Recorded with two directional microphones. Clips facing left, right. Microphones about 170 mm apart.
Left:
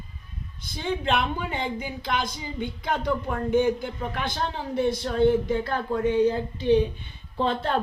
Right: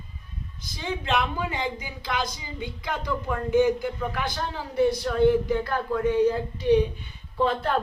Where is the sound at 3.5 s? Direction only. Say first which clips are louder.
Right 2 dB; 25° left (ahead or behind).